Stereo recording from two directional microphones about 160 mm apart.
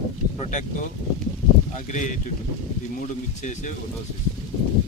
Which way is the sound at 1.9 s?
50° left (ahead or behind).